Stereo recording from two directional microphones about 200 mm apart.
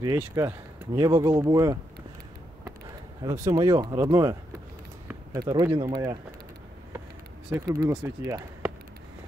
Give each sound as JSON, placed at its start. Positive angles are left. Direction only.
{"t": 0.0, "sound": "speech", "side_deg": -15}
{"t": 3.3, "sound": "speech", "side_deg": -15}
{"t": 7.5, "sound": "speech", "side_deg": -15}